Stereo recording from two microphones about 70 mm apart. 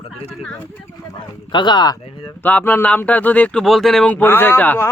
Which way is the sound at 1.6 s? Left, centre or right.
Left.